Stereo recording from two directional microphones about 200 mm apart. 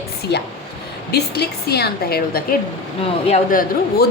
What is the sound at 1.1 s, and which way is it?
A woman's voice, 55° left (ahead or behind).